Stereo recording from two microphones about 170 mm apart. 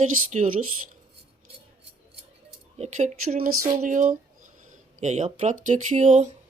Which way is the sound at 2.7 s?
40° right (ahead or behind).